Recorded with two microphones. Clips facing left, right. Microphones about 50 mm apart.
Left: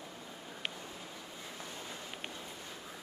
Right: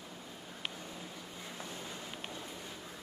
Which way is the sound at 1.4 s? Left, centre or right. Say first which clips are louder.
Right 2 dB; centre.